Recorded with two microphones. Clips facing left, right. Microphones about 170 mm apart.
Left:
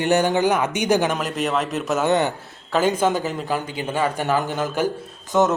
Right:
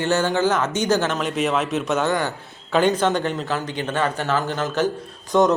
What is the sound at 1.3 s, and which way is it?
Speech, centre (ahead or behind).